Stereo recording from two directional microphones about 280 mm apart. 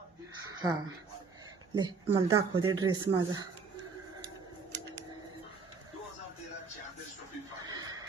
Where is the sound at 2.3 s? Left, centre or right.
Centre.